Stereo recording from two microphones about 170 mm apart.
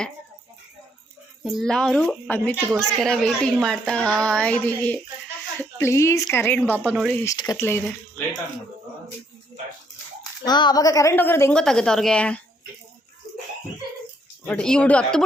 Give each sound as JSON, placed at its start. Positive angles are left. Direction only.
{"t": 1.5, "sound": "a woman's voice", "side_deg": 0}
{"t": 7.3, "sound": "a woman's voice", "side_deg": 20}
{"t": 10.4, "sound": "a woman's voice", "side_deg": 25}
{"t": 14.4, "sound": "a woman's voice", "side_deg": 5}